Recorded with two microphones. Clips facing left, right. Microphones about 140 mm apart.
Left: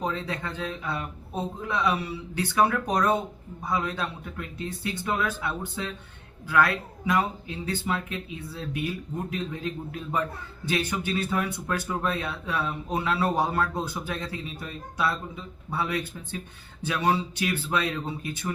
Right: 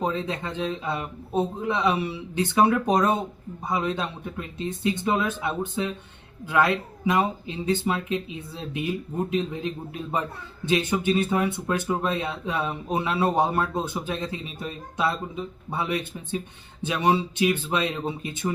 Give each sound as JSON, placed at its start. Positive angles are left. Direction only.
{"t": 0.0, "sound": "speech", "side_deg": -20}